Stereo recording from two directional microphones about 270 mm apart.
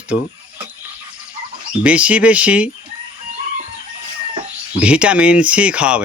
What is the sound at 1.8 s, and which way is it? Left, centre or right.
Speech, centre.